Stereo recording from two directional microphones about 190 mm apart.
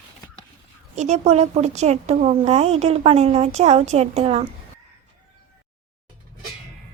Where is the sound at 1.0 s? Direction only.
35° right (ahead or behind).